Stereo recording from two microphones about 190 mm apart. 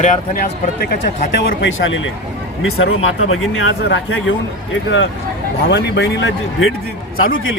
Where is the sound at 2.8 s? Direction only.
90° left.